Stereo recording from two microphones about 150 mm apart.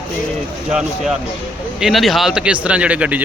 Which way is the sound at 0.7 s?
5° right (ahead or behind).